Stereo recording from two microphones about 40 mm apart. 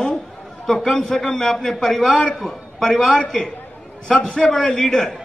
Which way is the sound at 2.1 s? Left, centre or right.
Left.